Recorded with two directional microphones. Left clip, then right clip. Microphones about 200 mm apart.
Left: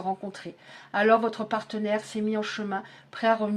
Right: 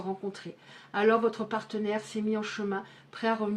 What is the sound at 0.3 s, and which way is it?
Speech, 35° left (ahead or behind).